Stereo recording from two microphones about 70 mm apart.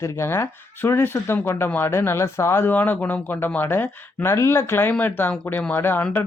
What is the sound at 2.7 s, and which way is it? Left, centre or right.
Speech, left.